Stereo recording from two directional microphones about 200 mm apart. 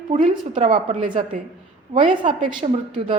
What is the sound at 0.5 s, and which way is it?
Speech, 25° right (ahead or behind).